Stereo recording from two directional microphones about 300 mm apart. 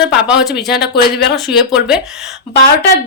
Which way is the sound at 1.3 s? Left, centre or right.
Centre.